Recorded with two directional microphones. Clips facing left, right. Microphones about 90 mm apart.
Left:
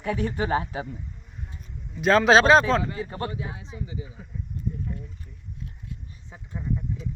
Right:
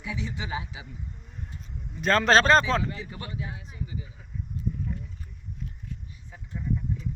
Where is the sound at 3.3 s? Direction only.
30° left (ahead or behind).